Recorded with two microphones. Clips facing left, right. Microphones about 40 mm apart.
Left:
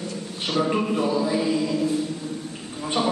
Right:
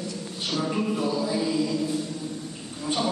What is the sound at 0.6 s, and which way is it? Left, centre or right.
Speech, left.